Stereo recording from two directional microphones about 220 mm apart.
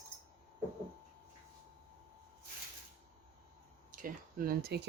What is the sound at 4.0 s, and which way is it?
Speech, 40° right (ahead or behind).